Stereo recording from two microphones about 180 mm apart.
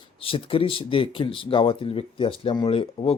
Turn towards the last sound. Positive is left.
turn(degrees=35)  # may be behind; listen again after turning